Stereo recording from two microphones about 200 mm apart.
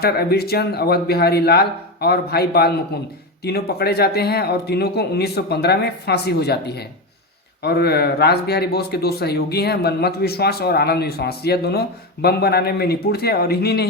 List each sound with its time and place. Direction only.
0.0 s speech: 50° left (ahead or behind)